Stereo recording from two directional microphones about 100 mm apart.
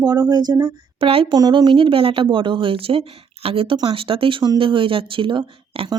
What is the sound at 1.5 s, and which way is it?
Speech, 55° right (ahead or behind).